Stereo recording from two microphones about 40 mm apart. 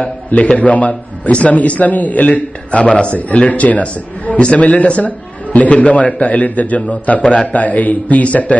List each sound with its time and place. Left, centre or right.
0.0 s a man's voice: left
3.2 s a man's voice: left
7.6 s a man's voice: left